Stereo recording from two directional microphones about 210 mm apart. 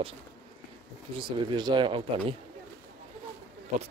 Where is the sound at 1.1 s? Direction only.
25° right (ahead or behind).